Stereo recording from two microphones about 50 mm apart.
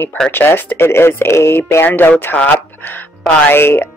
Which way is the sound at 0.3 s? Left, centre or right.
Left.